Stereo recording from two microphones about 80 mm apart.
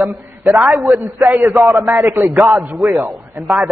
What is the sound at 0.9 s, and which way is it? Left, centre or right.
Speech, right.